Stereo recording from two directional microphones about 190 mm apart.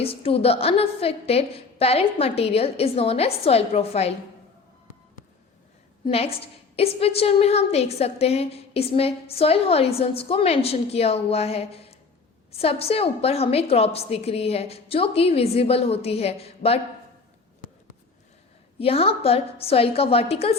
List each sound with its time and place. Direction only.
0.0 s a woman's voice: 30° left (ahead or behind)
6.1 s a woman's voice: 30° left (ahead or behind)
18.8 s a woman's voice: 30° left (ahead or behind)